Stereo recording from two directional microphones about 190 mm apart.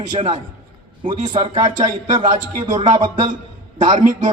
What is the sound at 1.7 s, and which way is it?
Music, 40° right (ahead or behind).